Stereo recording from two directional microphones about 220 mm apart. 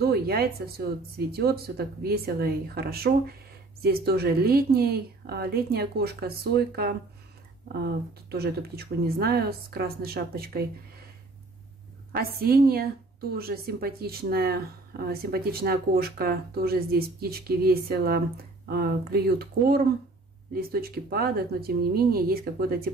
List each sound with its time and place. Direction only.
0.0 s speech: 45° right (ahead or behind)
8.3 s speech: 45° right (ahead or behind)
12.2 s speech: 45° right (ahead or behind)